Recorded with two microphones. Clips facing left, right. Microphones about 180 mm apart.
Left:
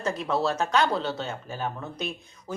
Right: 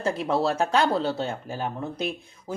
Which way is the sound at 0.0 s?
30° right (ahead or behind).